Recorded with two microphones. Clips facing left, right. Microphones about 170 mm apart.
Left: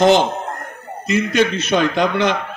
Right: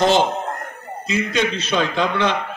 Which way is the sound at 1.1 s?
60° left (ahead or behind).